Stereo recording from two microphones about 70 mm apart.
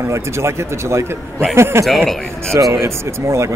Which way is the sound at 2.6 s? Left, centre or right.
Right.